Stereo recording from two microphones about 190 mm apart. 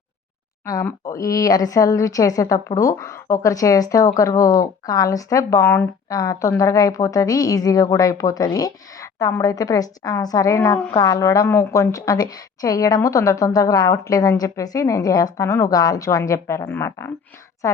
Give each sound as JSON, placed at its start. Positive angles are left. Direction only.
{"t": 0.6, "sound": "a woman's voice", "side_deg": 15}